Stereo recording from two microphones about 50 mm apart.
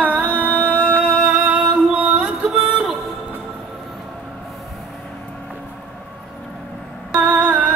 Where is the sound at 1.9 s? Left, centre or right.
Right.